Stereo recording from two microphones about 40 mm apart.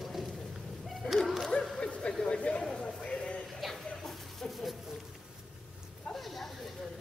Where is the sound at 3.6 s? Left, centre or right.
Centre.